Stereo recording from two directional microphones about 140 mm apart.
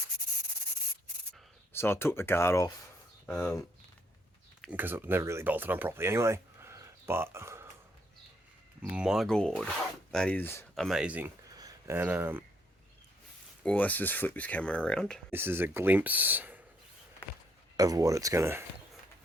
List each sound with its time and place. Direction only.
1.7 s speech: 15° left (ahead or behind)
3.2 s speech: 5° left (ahead or behind)
4.7 s speech: 15° right (ahead or behind)
8.9 s speech: 5° right (ahead or behind); by 10.7 s 15° left (ahead or behind)
10.8 s speech: centre (ahead or behind)
11.5 s a sound: 25° right (ahead or behind)
11.9 s speech: 15° right (ahead or behind)
13.6 s speech: 10° left (ahead or behind)
15.3 s speech: 15° right (ahead or behind)
17.7 s speech: 25° right (ahead or behind)